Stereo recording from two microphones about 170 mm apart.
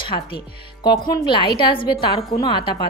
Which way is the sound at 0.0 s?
30° left (ahead or behind).